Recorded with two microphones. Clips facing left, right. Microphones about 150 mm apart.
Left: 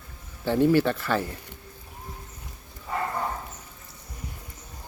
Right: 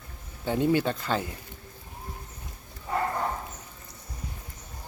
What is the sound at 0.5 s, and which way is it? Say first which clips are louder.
Speech: left 4 dB; 20° right (ahead or behind).